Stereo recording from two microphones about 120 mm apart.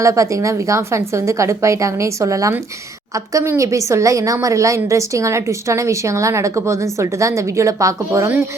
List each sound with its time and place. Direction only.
0.0 s a woman's voice: 25° right (ahead or behind)